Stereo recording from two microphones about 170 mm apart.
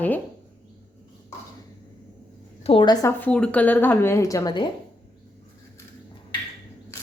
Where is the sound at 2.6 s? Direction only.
30° left (ahead or behind).